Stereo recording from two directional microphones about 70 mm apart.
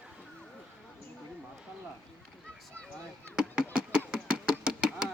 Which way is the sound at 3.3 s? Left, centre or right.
Centre.